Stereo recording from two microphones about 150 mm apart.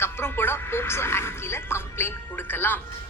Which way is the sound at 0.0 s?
15° left (ahead or behind).